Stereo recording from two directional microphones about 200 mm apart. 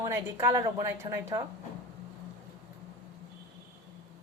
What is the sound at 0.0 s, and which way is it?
A woman's voice, 15° right (ahead or behind).